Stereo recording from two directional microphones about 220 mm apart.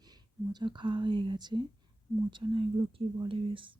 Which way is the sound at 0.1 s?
20° right (ahead or behind).